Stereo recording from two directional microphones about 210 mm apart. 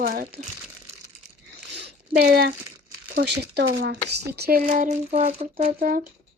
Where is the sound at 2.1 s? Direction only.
45° right (ahead or behind).